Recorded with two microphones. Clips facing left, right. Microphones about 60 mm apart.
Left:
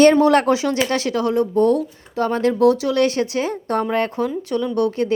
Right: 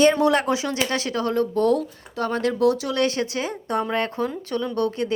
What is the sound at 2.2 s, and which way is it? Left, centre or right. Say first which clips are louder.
A woman's voice: left 5 dB; left.